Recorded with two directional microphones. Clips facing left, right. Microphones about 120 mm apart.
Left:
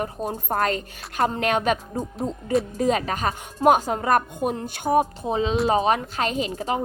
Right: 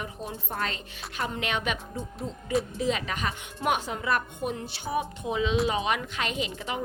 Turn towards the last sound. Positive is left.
turn(degrees=40)  # may be behind; listen again after turning